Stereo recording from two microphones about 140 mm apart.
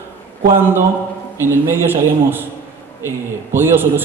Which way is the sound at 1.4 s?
15° right (ahead or behind).